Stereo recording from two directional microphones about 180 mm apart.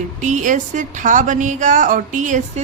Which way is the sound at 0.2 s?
45° right (ahead or behind).